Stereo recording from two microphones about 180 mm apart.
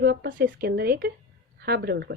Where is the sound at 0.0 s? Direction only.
65° right (ahead or behind).